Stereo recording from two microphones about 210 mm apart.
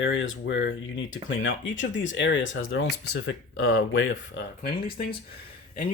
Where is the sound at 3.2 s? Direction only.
80° left.